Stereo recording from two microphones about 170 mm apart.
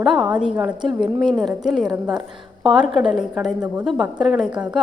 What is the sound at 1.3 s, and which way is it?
Speech, centre (ahead or behind).